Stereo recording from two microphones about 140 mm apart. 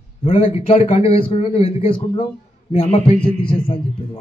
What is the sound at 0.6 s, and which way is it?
A man's voice, 40° left (ahead or behind).